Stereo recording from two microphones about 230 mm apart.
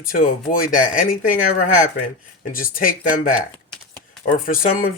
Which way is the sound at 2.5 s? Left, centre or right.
Left.